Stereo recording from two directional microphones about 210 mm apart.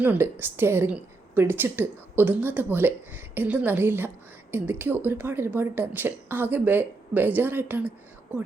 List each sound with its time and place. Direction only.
0.0 s a woman's voice: 10° right (ahead or behind)